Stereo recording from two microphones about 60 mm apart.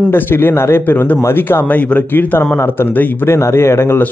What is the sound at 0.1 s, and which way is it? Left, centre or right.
A man's voice, left.